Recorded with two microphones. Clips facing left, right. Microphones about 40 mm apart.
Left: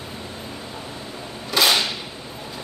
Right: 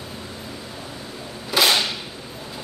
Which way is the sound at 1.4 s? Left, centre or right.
Centre.